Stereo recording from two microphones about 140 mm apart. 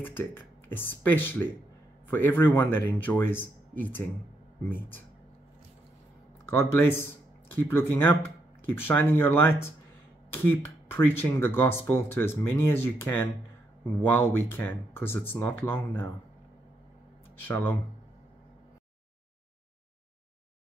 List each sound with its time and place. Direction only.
0.0 s speech: 15° left (ahead or behind)
6.5 s speech: 15° left (ahead or behind)
17.5 s speech: 15° left (ahead or behind)